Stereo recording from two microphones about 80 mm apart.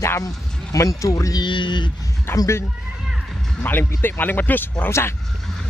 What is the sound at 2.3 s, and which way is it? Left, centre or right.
Speech, left.